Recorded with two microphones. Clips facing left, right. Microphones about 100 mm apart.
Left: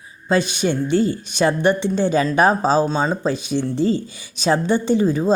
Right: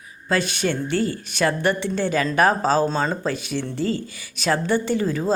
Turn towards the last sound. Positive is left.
turn(degrees=20)  # may be behind; listen again after turning